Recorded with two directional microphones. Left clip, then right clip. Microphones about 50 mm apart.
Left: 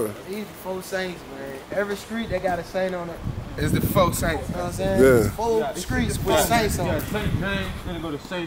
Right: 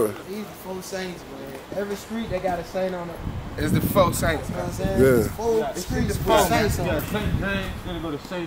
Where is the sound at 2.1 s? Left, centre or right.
Left.